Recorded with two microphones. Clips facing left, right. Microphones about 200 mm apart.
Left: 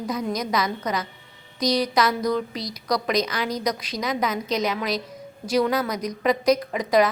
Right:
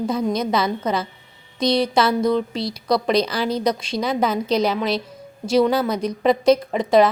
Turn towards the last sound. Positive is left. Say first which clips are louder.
# right 4 dB
turn(degrees=-25)  # may be behind; listen again after turning